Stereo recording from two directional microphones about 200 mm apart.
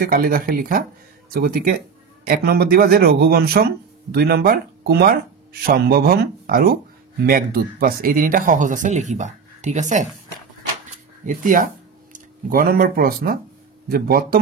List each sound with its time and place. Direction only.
0.0 s speech: 45° right (ahead or behind)
11.2 s speech: 40° right (ahead or behind)